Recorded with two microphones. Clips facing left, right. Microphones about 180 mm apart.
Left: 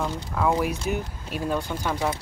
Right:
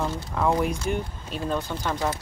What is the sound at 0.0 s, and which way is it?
Speech, centre (ahead or behind).